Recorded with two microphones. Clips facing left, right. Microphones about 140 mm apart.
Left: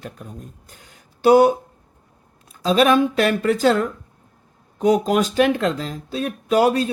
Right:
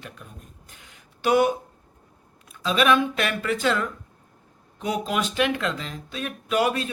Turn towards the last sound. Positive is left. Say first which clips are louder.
# left 6 dB
turn(degrees=35)  # may be behind; listen again after turning